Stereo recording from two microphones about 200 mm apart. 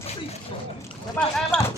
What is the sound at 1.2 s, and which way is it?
Speech, 10° left (ahead or behind).